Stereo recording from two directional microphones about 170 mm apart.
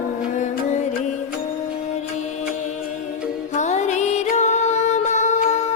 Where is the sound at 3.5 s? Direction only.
45° left (ahead or behind).